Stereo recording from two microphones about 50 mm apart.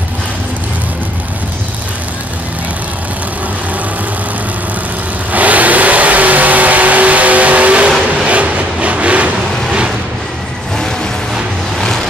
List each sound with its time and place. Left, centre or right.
5.3 s vehicle: right
8.3 s train: right